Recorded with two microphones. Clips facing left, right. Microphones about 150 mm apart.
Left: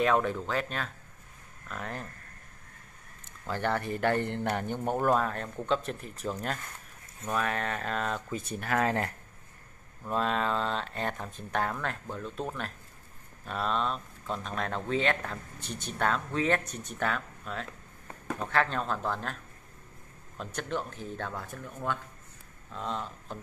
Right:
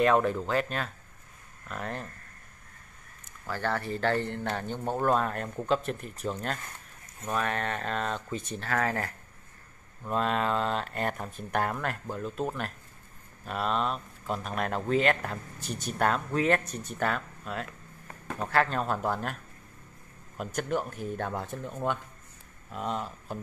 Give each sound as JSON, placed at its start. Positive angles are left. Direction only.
{"t": 0.0, "sound": "speech", "side_deg": 0}
{"t": 3.4, "sound": "speech", "side_deg": 20}
{"t": 8.5, "sound": "speech", "side_deg": 15}
{"t": 10.0, "sound": "speech", "side_deg": 0}
{"t": 20.3, "sound": "speech", "side_deg": -10}